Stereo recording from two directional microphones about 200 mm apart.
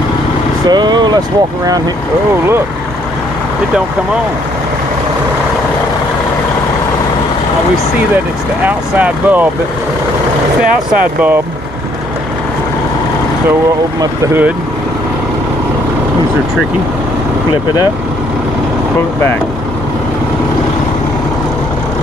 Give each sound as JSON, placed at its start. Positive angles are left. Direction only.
{"t": 0.7, "sound": "speech", "side_deg": -20}
{"t": 8.6, "sound": "speech", "side_deg": -10}
{"t": 10.9, "sound": "speech", "side_deg": -5}
{"t": 14.2, "sound": "speech", "side_deg": -10}